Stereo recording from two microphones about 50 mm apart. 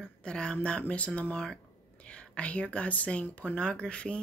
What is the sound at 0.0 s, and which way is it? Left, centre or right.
Speech, centre.